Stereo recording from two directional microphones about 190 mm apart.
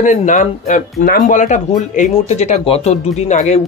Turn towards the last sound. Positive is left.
turn(degrees=35)  # may be behind; listen again after turning